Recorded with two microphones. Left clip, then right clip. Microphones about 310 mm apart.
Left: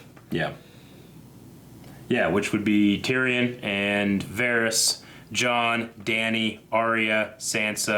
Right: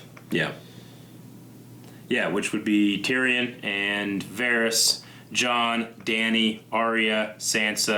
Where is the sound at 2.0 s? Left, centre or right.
Left.